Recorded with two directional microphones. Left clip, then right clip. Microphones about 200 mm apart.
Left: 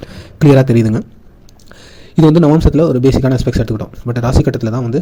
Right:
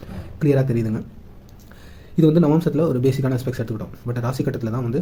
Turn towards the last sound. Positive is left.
turn(degrees=35)  # may be behind; listen again after turning